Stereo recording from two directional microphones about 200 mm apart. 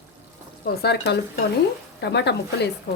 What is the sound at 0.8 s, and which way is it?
Dishes, 55° left (ahead or behind).